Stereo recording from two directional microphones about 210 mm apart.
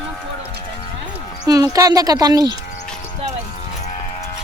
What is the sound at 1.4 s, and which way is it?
Speech, 15° right (ahead or behind).